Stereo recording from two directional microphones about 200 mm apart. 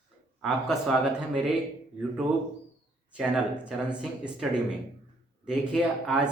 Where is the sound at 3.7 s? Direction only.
5° right (ahead or behind).